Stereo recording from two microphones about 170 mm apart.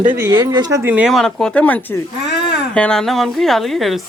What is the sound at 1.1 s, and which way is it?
A woman's voice, 5° left (ahead or behind).